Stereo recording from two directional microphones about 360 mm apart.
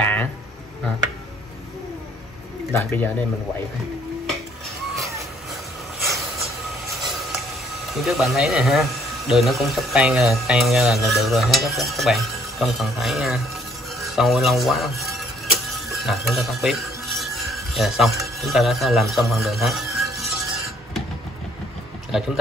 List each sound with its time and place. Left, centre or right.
0.0 s speech: centre
2.7 s speech: centre
5.9 s a sound: centre
7.9 s speech: centre
15.7 s music: centre